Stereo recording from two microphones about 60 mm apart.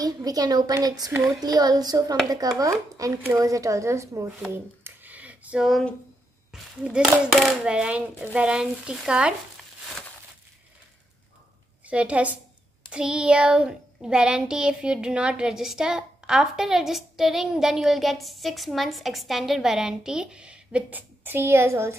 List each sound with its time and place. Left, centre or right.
0.0 s a child's voice: right
2.6 s speech: right
4.8 s a sound: right
5.6 s speech: centre
6.5 s a child's voice: centre
11.8 s a woman's voice: right
20.9 s a woman's voice: right